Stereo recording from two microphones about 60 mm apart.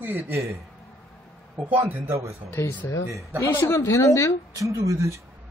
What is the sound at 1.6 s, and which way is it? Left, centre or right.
Speech, right.